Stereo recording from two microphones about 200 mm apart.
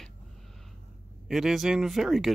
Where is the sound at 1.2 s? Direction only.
Centre (ahead or behind).